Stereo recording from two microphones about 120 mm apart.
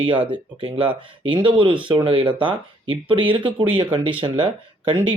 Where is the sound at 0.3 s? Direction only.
45° right (ahead or behind).